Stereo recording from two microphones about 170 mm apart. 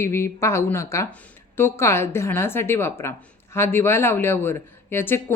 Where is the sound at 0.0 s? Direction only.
15° left (ahead or behind).